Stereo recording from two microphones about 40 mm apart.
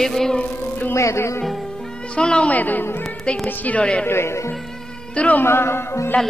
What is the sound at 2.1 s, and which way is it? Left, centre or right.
Speech, left.